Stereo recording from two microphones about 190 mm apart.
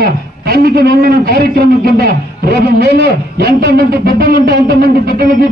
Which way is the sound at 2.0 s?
55° right (ahead or behind).